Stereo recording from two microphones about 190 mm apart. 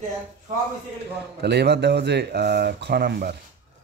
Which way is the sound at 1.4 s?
60° right (ahead or behind).